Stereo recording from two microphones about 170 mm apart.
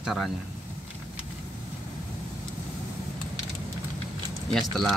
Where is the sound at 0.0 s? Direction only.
Centre (ahead or behind).